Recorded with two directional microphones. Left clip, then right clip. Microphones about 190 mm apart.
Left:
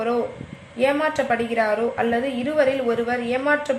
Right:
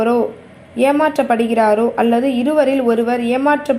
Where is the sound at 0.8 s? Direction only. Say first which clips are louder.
Right 6 dB; 25° right (ahead or behind).